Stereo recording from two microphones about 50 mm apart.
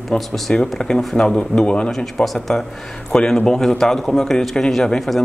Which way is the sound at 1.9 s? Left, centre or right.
Centre.